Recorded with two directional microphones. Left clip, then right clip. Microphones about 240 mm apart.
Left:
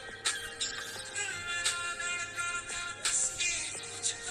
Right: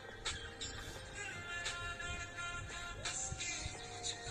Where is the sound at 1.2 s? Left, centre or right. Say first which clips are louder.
Left 9 dB; left.